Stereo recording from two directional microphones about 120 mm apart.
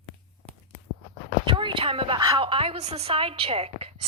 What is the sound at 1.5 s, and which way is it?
A woman's voice, 45° right (ahead or behind).